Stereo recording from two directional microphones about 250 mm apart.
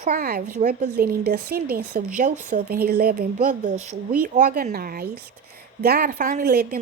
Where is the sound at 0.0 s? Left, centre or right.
Right.